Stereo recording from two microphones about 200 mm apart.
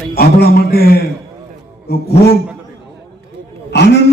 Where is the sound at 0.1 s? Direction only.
50° left (ahead or behind).